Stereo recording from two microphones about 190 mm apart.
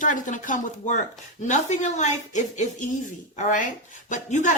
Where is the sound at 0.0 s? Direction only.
45° left (ahead or behind).